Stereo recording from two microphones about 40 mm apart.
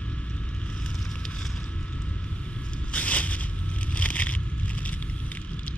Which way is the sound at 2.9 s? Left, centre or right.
Left.